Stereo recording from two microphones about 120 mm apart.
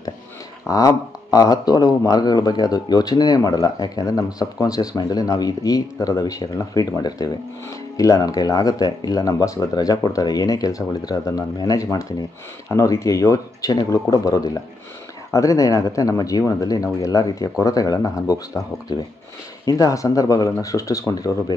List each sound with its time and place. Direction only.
0.7 s speech: 30° left (ahead or behind)